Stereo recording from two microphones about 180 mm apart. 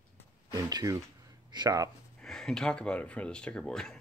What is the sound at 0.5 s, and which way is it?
Speech, 20° right (ahead or behind).